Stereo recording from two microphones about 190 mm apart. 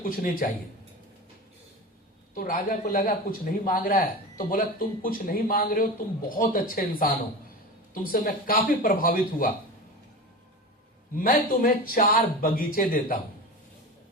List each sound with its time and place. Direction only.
0.0 s speech: 45° left (ahead or behind)
2.3 s speech: 50° left (ahead or behind)
8.1 s speech: 50° left (ahead or behind)
11.2 s speech: 45° left (ahead or behind)